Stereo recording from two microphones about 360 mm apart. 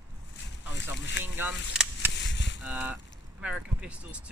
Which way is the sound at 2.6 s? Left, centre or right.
Centre.